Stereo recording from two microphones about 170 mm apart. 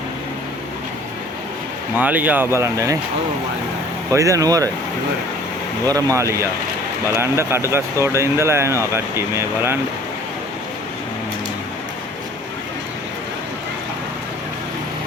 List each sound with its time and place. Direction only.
2.0 s speech: 10° right (ahead or behind)
4.1 s speech: 20° right (ahead or behind)
5.9 s speech: 15° right (ahead or behind)